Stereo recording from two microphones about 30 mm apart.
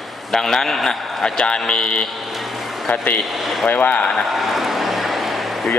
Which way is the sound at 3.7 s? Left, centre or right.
Left.